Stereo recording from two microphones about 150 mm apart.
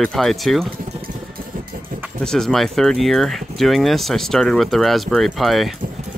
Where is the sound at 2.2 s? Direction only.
5° left (ahead or behind).